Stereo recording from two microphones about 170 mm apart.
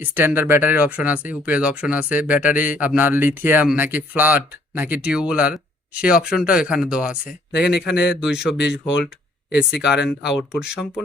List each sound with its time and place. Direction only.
0.0 s speech: 10° right (ahead or behind)
7.3 s speech: 75° left (ahead or behind)
8.1 s speech: 5° right (ahead or behind)
8.5 s speech: 80° left
9.8 s speech: 5° right (ahead or behind)